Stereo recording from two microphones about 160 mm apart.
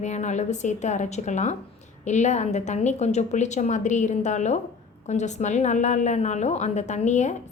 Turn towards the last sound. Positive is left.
turn(degrees=45)  # may be behind; listen again after turning